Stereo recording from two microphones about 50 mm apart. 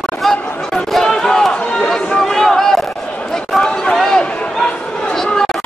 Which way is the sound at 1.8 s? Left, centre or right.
Centre.